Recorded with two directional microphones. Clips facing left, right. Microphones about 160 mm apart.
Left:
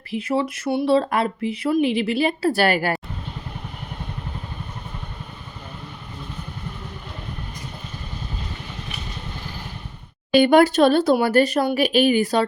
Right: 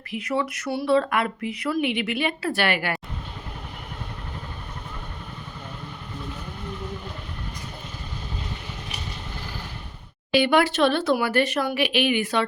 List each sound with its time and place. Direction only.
0.1 s speech: 30° left (ahead or behind)
10.3 s speech: 45° left (ahead or behind)